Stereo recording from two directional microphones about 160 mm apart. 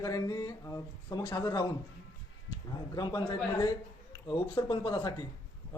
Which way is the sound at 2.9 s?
25° left (ahead or behind).